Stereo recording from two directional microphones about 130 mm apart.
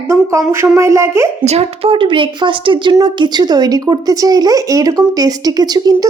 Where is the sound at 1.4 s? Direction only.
50° right (ahead or behind); by 6.0 s 30° right (ahead or behind).